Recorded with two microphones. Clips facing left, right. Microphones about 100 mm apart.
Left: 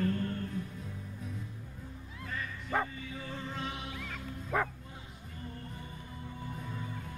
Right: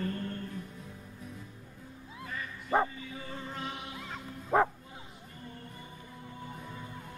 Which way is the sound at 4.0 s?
20° right (ahead or behind).